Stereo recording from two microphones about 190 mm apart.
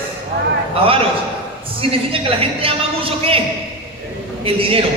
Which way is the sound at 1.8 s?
30° right (ahead or behind).